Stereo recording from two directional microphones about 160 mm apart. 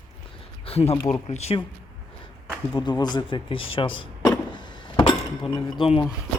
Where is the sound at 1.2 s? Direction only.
40° left (ahead or behind).